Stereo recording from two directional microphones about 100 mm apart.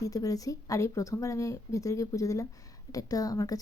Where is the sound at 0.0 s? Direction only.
35° left (ahead or behind).